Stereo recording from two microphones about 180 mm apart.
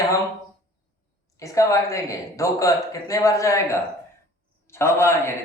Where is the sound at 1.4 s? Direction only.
15° left (ahead or behind).